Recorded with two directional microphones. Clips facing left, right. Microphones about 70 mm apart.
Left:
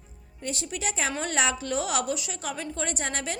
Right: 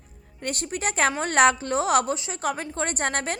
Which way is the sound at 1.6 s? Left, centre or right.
Right.